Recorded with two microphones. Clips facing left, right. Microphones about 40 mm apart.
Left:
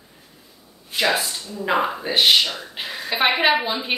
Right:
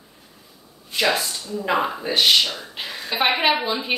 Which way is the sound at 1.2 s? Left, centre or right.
Centre.